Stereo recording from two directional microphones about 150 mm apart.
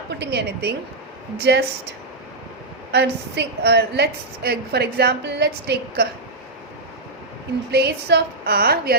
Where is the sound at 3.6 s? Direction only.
90° right.